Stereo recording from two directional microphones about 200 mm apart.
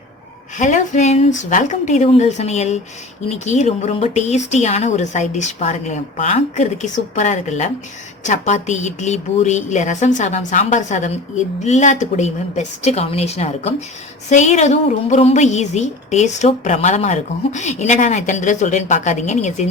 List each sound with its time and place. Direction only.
0.6 s a woman's voice: 35° left (ahead or behind)